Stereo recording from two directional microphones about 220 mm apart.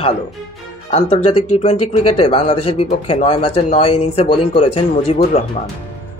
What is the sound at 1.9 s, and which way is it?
Speech, 25° left (ahead or behind).